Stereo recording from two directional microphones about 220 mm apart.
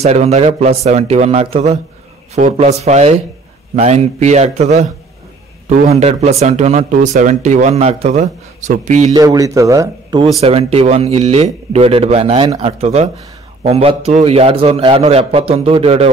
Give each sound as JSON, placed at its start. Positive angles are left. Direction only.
{"t": 0.0, "sound": "a man's voice", "side_deg": -30}
{"t": 9.1, "sound": "speech", "side_deg": -15}
{"t": 10.4, "sound": "a man's voice", "side_deg": -30}